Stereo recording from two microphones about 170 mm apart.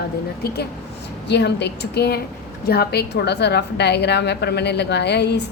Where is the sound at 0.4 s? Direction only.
70° left (ahead or behind).